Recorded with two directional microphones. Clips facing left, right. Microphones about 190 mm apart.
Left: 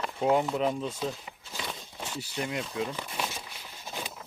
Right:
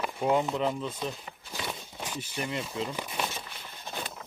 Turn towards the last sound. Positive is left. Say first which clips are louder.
# right 1 dB
turn(degrees=5)  # may be behind; listen again after turning